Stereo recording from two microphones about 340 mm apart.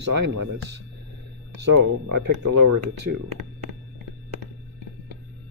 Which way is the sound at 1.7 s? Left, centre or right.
Right.